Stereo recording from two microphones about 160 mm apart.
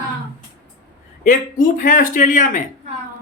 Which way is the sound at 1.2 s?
55° left (ahead or behind).